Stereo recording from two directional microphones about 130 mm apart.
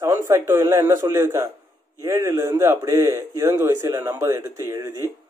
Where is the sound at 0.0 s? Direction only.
20° right (ahead or behind).